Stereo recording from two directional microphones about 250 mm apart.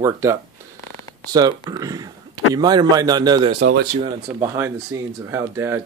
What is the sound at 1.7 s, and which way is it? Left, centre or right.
Speech, centre.